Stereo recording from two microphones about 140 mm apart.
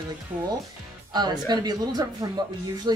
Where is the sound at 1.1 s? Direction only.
30° right (ahead or behind).